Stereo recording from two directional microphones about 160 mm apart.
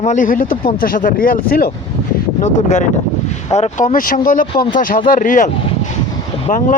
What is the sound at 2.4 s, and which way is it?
Speech, 50° left (ahead or behind).